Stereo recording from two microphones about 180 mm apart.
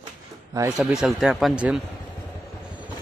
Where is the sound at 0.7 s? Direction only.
5° right (ahead or behind).